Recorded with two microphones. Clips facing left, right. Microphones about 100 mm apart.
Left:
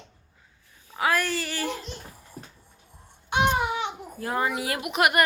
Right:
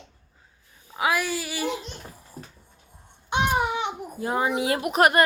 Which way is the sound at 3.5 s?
15° right (ahead or behind).